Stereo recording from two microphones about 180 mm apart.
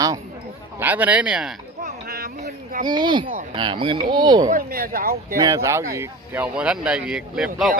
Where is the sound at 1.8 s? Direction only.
60° right (ahead or behind).